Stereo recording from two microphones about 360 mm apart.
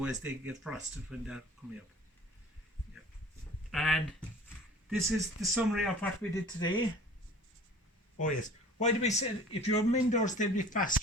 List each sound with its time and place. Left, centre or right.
0.0 s speech: centre
3.7 s speech: centre
8.2 s speech: centre